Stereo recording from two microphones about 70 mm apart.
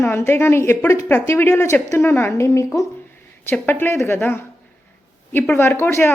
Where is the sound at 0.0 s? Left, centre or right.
Left.